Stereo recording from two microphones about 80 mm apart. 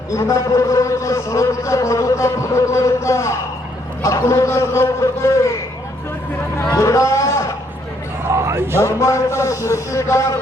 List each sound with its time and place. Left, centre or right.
0.2 s a man's voice: left
6.7 s a man's voice: left
8.4 s music: right
8.8 s a man's voice: left